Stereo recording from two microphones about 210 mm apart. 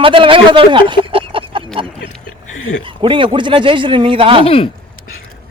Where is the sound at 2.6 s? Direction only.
70° left (ahead or behind).